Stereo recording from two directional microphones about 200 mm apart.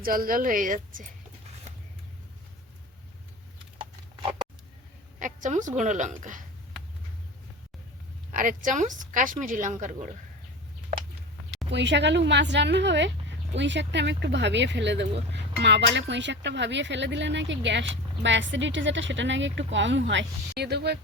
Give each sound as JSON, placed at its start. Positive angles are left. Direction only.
{"t": 0.0, "sound": "a woman's voice", "side_deg": -45}
{"t": 3.8, "sound": "clip-clop", "side_deg": -25}
{"t": 5.2, "sound": "a woman's voice", "side_deg": -40}
{"t": 8.4, "sound": "a woman's voice", "side_deg": -40}
{"t": 11.7, "sound": "speech", "side_deg": -60}